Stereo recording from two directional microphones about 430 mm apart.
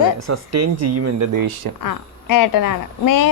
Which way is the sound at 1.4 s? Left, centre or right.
Right.